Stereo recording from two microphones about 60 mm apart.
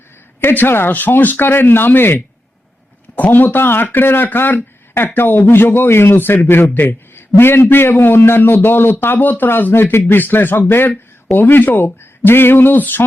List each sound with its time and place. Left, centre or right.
0.4 s speech: left